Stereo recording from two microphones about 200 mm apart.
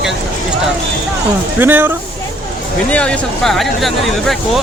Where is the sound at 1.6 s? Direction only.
10° right (ahead or behind).